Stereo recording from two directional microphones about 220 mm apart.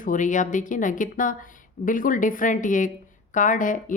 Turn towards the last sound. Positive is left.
turn(degrees=35)  # may be behind; listen again after turning